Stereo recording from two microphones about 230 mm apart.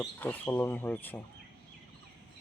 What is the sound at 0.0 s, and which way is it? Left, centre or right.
Speech, centre.